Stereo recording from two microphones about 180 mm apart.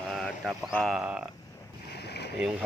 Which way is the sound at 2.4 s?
5° right (ahead or behind).